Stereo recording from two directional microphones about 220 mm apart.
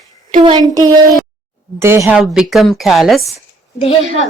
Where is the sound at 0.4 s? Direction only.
20° right (ahead or behind); by 3.3 s centre (ahead or behind).